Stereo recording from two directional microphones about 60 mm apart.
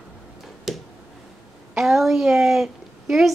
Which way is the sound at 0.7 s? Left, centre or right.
Centre.